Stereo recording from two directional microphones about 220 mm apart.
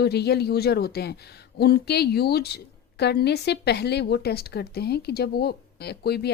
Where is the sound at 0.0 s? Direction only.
50° left (ahead or behind).